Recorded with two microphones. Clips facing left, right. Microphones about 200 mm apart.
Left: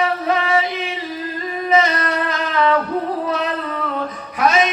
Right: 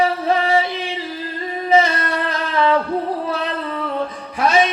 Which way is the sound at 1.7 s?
30° right (ahead or behind).